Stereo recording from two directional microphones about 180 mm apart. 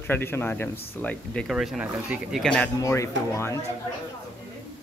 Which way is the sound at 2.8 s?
15° left (ahead or behind).